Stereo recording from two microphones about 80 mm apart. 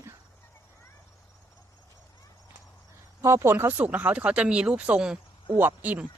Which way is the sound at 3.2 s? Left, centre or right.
Right.